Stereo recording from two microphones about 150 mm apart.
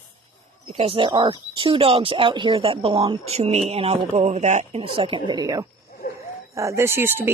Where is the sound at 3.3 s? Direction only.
45° right (ahead or behind).